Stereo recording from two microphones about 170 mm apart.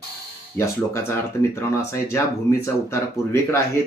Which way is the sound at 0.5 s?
15° left (ahead or behind).